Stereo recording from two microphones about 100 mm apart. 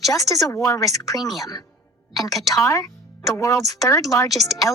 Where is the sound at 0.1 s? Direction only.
35° left (ahead or behind).